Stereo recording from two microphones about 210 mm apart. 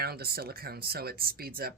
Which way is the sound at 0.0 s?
50° right (ahead or behind).